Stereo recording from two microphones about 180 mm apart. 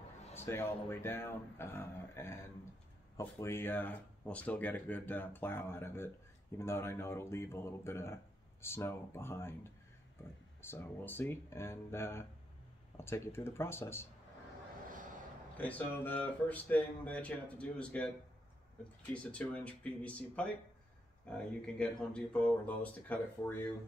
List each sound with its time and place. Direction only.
0.4 s speech: 15° left (ahead or behind)
14.9 s vehicle: 45° right (ahead or behind)
15.5 s speech: 10° left (ahead or behind)
19.1 s speech: 5° left (ahead or behind)